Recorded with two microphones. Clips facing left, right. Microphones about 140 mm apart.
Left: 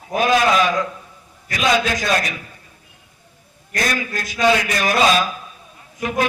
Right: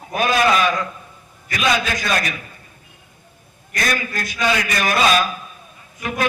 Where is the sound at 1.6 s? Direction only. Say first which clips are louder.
Left 2 dB; 25° left (ahead or behind).